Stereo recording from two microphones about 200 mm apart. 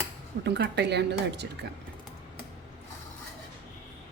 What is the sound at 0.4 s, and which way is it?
Speech, 55° right (ahead or behind).